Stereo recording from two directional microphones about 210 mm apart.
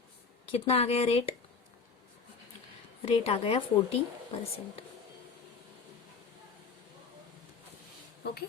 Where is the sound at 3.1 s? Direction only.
30° left (ahead or behind).